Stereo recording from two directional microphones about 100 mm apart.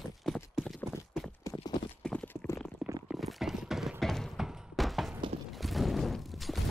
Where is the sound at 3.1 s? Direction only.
Centre (ahead or behind).